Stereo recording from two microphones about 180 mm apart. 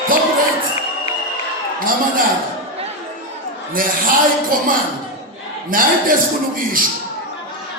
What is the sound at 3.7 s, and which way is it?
Music, 50° right (ahead or behind).